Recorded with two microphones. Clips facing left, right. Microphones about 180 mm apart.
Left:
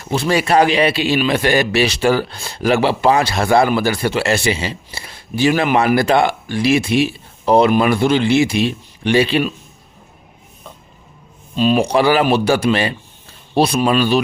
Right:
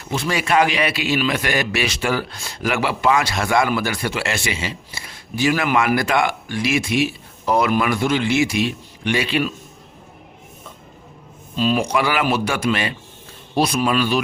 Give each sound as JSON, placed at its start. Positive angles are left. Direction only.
{"t": 0.1, "sound": "a man's voice", "side_deg": 35}
{"t": 11.5, "sound": "speech", "side_deg": 20}
{"t": 11.9, "sound": "a man's voice", "side_deg": 30}